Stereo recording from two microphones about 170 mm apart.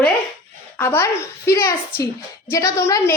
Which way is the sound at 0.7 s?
15° left (ahead or behind).